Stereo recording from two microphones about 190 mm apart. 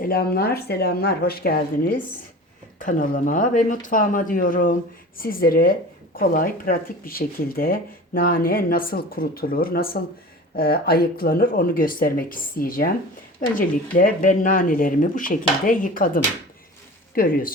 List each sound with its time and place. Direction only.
0.0 s speech: 50° left (ahead or behind)
13.9 s speech: 45° left (ahead or behind)